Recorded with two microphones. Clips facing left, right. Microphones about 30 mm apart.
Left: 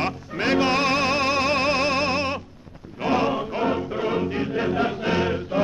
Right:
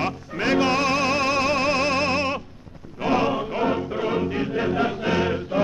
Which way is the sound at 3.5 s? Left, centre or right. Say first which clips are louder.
Even; centre.